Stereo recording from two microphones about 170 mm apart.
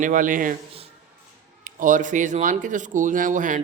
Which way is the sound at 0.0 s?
50° right (ahead or behind).